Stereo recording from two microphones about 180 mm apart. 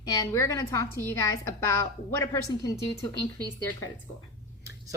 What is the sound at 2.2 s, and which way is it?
Speech, 20° left (ahead or behind).